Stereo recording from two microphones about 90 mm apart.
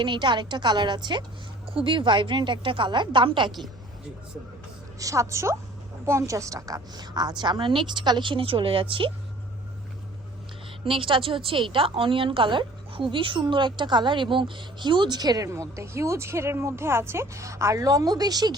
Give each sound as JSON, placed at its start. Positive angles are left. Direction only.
{"t": 0.0, "sound": "a woman's voice", "side_deg": -60}
{"t": 1.6, "sound": "a woman's voice", "side_deg": -80}
{"t": 4.9, "sound": "a woman's voice", "side_deg": -40}
{"t": 10.8, "sound": "a woman's voice", "side_deg": -75}
{"t": 15.4, "sound": "speech", "side_deg": -35}